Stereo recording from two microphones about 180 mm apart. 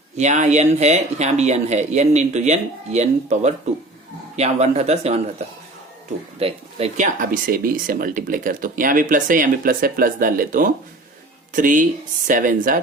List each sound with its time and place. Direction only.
0.2 s speech: 40° right (ahead or behind)
6.4 s speech: 35° right (ahead or behind); by 12.8 s 50° right (ahead or behind)